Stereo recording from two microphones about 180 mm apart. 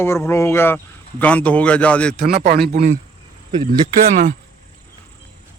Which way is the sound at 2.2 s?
60° right (ahead or behind).